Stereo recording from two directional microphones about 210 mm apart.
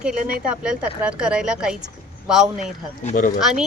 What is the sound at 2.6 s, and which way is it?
Speech, 35° left (ahead or behind).